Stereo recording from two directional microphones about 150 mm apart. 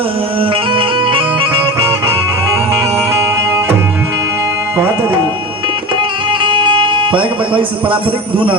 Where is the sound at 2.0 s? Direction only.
20° right (ahead or behind).